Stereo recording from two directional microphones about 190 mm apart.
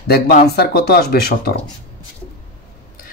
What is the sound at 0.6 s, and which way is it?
Speech, 55° left (ahead or behind).